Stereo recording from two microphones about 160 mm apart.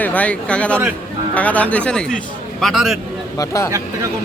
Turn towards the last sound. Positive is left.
turn(degrees=20)  # may be behind; listen again after turning